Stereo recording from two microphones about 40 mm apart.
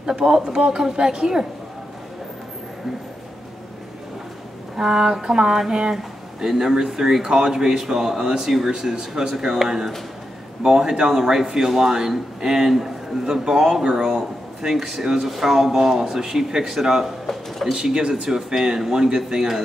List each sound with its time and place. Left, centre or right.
0.0 s a man's voice: centre
4.7 s a man's voice: centre